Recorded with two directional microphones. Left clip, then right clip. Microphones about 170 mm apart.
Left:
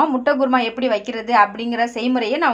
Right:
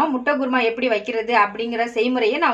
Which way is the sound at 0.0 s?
45° left (ahead or behind).